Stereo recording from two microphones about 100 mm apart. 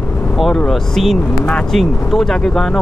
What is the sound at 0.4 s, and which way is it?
Speech, 5° left (ahead or behind).